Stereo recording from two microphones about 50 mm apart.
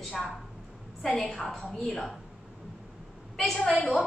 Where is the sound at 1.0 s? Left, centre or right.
Centre.